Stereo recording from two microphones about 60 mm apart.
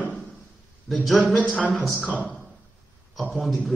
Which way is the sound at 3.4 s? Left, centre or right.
Centre.